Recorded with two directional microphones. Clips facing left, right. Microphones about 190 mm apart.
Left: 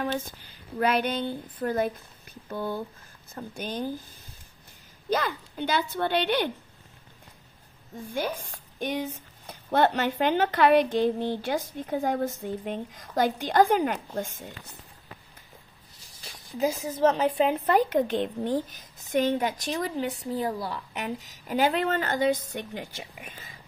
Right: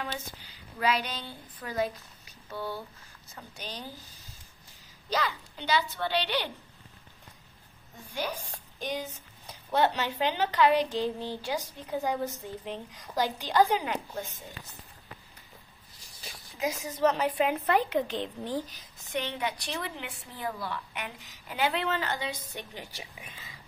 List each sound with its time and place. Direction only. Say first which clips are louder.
0.0 s a woman's voice: left 7 dB; 50° left (ahead or behind)
5.1 s a woman's voice: left 4 dB; 50° left (ahead or behind)
8.1 s a woman's voice: left 4 dB; 50° left (ahead or behind)
17.4 s a woman's voice: left 3 dB; 35° left (ahead or behind)